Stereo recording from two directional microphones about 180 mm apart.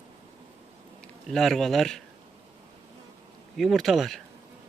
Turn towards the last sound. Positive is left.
turn(degrees=0)  # may be behind; listen again after turning